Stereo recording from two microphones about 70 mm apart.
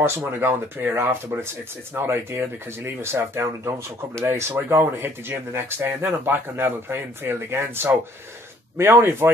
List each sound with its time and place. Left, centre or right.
0.4 s speech: right